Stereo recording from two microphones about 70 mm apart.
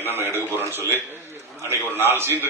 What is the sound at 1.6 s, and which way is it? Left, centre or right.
Speech, right.